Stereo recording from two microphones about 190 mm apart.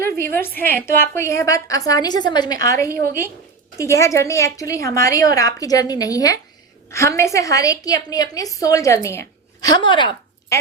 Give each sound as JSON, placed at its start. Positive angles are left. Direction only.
{"t": 0.0, "sound": "a woman's voice", "side_deg": 10}